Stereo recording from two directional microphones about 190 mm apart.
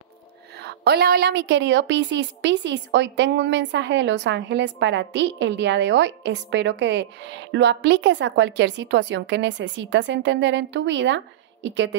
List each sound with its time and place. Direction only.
0.6 s a woman's voice: 60° right (ahead or behind)